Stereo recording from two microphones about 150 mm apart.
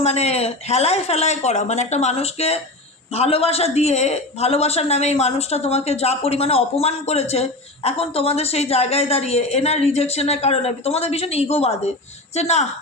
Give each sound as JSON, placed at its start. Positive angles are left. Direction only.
{"t": 0.0, "sound": "a man's voice", "side_deg": 45}